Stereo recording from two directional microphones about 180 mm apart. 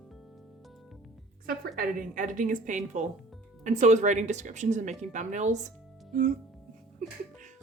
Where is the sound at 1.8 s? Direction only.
50° right (ahead or behind).